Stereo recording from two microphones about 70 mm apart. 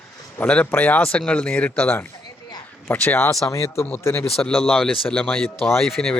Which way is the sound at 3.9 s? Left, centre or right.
Left.